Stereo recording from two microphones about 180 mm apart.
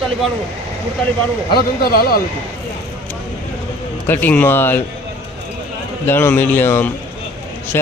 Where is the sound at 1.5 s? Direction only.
60° left (ahead or behind).